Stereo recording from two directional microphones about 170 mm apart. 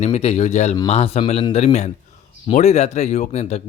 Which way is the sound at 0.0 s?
40° left (ahead or behind).